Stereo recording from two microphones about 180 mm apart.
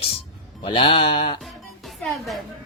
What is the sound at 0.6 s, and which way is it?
Speech, 30° left (ahead or behind).